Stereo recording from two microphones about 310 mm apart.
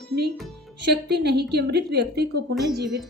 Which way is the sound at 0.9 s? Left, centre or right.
Right.